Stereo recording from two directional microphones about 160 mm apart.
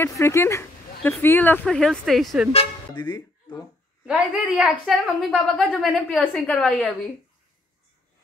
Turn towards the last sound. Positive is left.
turn(degrees=5)  # may be behind; listen again after turning